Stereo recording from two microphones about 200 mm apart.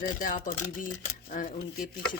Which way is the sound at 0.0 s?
45° left (ahead or behind).